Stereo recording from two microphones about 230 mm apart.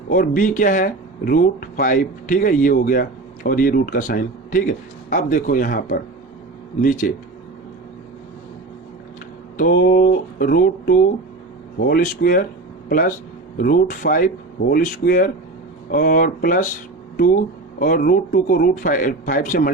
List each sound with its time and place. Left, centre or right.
0.1 s speech: left
9.6 s speech: left